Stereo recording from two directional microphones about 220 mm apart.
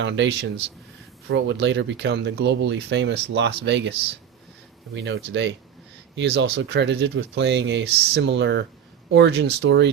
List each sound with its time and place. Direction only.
0.0 s speech: 55° right (ahead or behind)
4.9 s speech: 55° right (ahead or behind)